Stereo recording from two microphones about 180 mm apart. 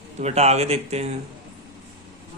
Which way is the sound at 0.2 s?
35° right (ahead or behind).